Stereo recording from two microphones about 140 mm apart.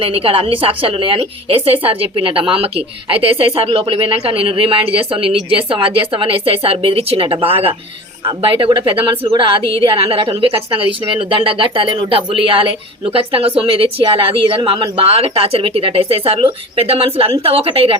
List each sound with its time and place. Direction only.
0.0 s a woman's voice: 40° right (ahead or behind)